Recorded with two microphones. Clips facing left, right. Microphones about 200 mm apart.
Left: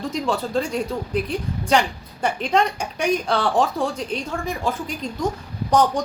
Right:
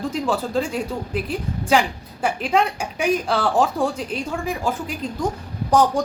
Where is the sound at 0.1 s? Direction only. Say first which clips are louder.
Left 2 dB; 5° right (ahead or behind).